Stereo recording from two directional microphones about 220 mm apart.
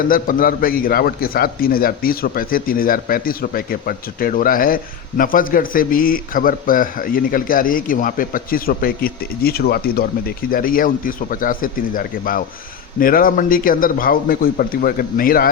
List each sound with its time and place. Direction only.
0.1 s a man's voice: 40° left (ahead or behind)